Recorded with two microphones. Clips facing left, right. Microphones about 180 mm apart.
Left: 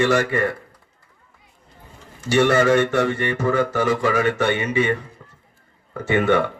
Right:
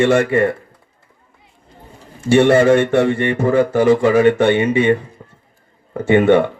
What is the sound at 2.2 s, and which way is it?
Speech, 30° right (ahead or behind).